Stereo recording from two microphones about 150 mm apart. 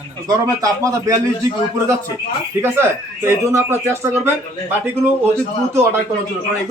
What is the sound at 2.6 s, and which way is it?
A man's voice, 15° right (ahead or behind).